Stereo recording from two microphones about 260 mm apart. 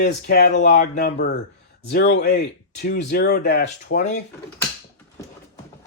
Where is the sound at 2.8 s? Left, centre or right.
Left.